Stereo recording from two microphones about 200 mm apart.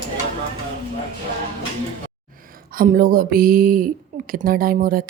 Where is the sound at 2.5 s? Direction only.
45° right (ahead or behind).